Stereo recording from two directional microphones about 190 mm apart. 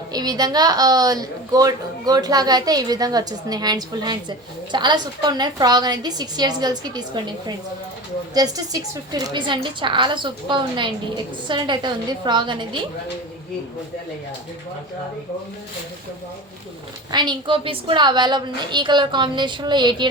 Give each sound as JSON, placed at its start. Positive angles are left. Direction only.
{"t": 0.1, "sound": "a woman's voice", "side_deg": -20}
{"t": 17.1, "sound": "a woman's voice", "side_deg": -25}